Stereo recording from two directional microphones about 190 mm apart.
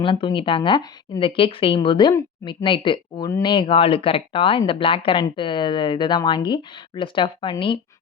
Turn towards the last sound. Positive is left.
turn(degrees=25)  # may be behind; listen again after turning